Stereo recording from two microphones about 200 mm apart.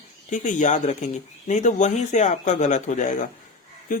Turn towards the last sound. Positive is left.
turn(degrees=45)  # may be behind; listen again after turning